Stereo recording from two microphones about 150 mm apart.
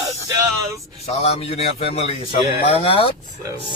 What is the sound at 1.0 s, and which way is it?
A man's voice, 40° left (ahead or behind).